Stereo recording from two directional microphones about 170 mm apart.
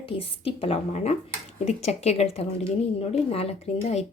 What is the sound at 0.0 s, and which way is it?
Speech, 35° left (ahead or behind).